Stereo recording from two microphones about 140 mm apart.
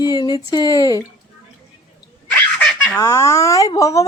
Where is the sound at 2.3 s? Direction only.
10° left (ahead or behind).